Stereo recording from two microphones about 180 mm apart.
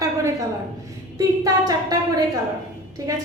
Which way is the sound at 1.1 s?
20° right (ahead or behind).